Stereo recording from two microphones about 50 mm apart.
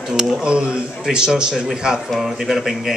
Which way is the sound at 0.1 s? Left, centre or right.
Centre.